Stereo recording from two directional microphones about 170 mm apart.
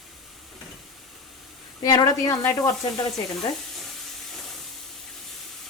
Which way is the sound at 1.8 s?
20° left (ahead or behind).